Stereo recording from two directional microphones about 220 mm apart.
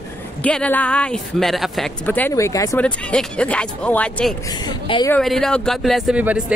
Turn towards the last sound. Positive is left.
turn(degrees=-5)  # may be behind; listen again after turning